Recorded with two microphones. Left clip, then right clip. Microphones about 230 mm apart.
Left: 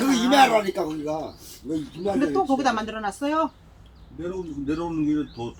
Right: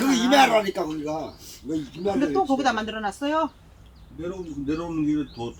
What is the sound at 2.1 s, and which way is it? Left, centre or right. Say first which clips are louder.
Speech: even; centre.